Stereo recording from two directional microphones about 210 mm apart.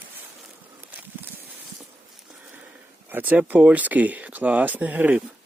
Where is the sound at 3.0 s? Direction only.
10° right (ahead or behind).